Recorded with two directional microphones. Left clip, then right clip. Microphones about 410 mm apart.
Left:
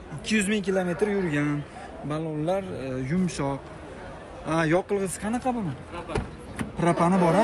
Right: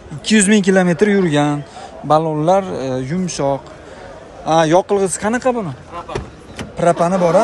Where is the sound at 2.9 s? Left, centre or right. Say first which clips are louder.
Right 9 dB; centre.